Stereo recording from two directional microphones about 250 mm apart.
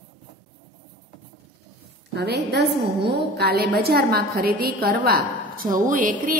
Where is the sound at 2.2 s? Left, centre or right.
Right.